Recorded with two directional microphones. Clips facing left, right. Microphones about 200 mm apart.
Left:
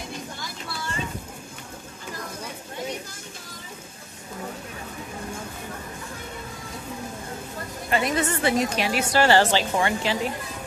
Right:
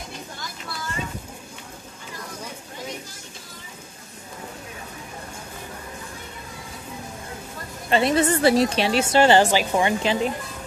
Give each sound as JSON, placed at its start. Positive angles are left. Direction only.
{"t": 7.9, "sound": "a woman's voice", "side_deg": -30}